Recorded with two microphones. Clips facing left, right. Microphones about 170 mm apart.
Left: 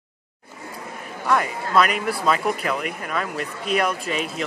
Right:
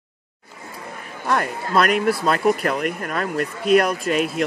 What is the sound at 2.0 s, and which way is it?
Speech, 45° right (ahead or behind).